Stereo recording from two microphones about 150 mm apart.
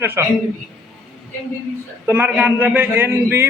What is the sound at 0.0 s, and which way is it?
Speech, 15° right (ahead or behind).